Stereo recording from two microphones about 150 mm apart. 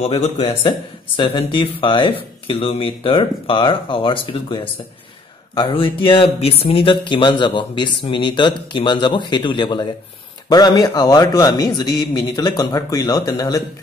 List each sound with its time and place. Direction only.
0.0 s speech: 40° left (ahead or behind)
0.7 s a man's voice: 30° left (ahead or behind)